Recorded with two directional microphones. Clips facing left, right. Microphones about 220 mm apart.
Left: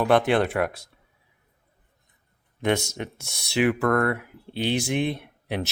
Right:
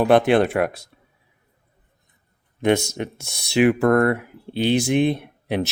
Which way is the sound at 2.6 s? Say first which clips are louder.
Right 5 dB; 10° right (ahead or behind).